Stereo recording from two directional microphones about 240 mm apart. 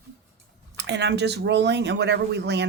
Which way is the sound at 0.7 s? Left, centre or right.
Right.